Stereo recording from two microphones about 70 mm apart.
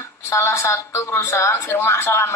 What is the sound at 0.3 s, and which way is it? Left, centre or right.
Speech, left.